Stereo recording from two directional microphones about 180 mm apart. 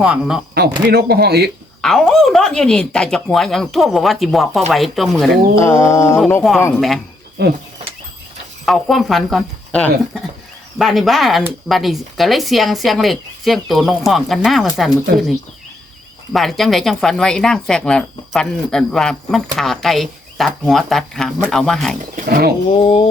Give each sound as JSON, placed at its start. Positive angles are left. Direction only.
{"t": 0.0, "sound": "a woman's voice", "side_deg": -5}
{"t": 0.5, "sound": "speech", "side_deg": -65}
{"t": 1.8, "sound": "a woman's voice", "side_deg": 0}
{"t": 5.5, "sound": "mantra", "side_deg": 15}
{"t": 6.7, "sound": "a woman's voice", "side_deg": 0}
{"t": 7.4, "sound": "speech", "side_deg": -65}
{"t": 8.6, "sound": "a woman's voice", "side_deg": 0}
{"t": 16.3, "sound": "a woman's voice", "side_deg": 0}
{"t": 22.1, "sound": "speech", "side_deg": -60}
{"t": 22.7, "sound": "speech", "side_deg": 30}